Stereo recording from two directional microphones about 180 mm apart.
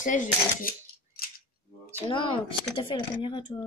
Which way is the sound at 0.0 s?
45° left (ahead or behind).